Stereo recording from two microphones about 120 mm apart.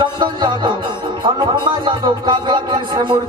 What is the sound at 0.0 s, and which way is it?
Music, 40° right (ahead or behind).